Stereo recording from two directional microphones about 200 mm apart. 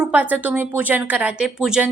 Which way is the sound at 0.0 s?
5° right (ahead or behind).